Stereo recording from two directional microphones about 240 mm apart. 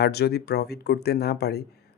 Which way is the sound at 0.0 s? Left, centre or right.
Left.